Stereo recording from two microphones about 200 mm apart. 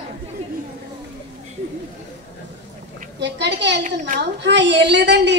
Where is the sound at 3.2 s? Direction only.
60° right (ahead or behind).